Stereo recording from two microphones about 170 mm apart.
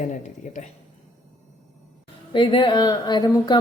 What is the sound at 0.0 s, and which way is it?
Speech, 45° left (ahead or behind).